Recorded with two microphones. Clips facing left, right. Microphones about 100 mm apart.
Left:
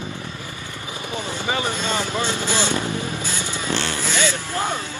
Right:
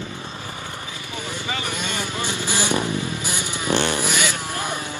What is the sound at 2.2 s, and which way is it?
Speech, 15° right (ahead or behind).